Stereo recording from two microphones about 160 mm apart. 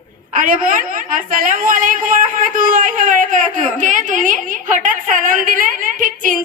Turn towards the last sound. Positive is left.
turn(degrees=-55)  # may be behind; listen again after turning